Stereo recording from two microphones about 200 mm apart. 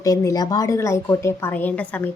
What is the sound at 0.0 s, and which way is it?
A woman's voice, 15° left (ahead or behind).